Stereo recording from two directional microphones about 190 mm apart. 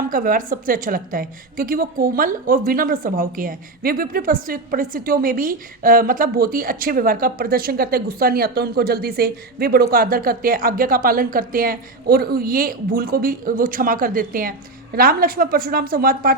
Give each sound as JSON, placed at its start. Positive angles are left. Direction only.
{"t": 0.1, "sound": "a woman's voice", "side_deg": -45}